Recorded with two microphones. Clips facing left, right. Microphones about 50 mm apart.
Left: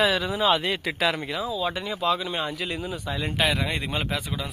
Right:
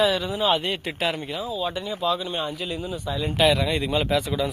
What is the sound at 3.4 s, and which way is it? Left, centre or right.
Speech, left.